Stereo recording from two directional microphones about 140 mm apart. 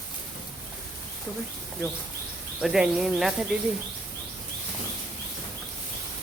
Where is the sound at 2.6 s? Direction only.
5° right (ahead or behind).